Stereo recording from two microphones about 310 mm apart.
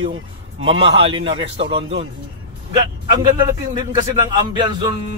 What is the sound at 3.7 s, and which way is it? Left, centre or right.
Speech, centre.